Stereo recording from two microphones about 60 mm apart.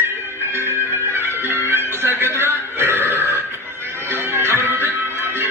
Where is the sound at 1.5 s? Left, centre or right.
Right.